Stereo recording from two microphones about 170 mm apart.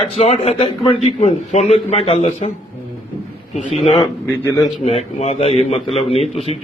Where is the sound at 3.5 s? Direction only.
45° left (ahead or behind).